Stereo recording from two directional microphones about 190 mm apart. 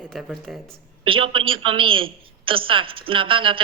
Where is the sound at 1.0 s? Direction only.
25° right (ahead or behind).